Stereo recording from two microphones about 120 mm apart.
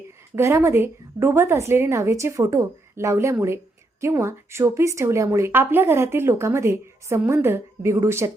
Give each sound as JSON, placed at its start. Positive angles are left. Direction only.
{"t": 0.3, "sound": "speech", "side_deg": -20}